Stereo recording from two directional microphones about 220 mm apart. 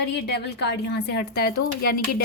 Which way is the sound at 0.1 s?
50° left (ahead or behind).